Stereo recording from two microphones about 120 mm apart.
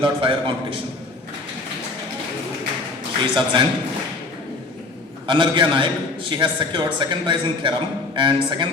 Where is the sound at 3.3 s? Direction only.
40° right (ahead or behind).